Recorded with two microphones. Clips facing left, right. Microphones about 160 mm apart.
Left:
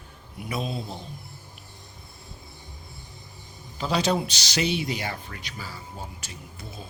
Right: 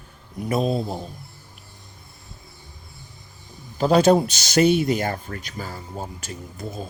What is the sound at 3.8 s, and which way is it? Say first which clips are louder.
Speech: right 9 dB; 50° right (ahead or behind).